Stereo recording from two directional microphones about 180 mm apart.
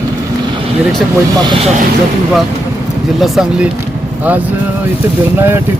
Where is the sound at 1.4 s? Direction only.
30° right (ahead or behind).